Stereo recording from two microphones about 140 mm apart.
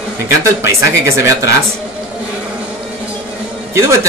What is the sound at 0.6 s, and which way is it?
Speech, 20° right (ahead or behind).